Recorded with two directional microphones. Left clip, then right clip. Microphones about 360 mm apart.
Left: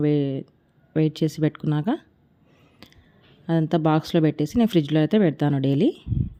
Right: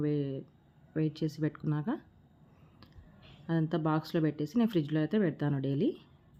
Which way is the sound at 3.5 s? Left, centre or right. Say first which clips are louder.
Left 10 dB; left.